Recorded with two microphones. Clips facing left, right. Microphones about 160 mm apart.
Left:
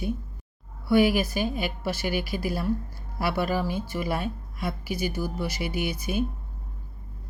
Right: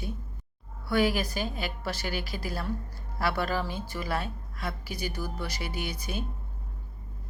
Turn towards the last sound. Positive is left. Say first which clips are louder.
# left 6 dB
turn(degrees=10)  # may be behind; listen again after turning